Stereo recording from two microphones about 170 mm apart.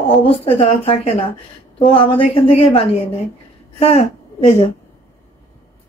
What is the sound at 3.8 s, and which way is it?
Speech, 35° left (ahead or behind).